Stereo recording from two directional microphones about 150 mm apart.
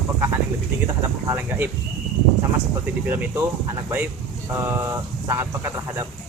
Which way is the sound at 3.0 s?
15° right (ahead or behind).